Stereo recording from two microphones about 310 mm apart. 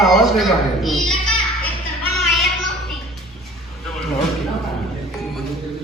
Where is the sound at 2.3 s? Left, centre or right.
Centre.